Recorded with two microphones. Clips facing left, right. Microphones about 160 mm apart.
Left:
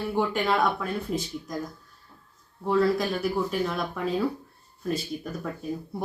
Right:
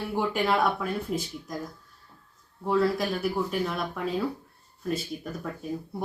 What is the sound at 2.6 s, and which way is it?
Speech, 5° right (ahead or behind).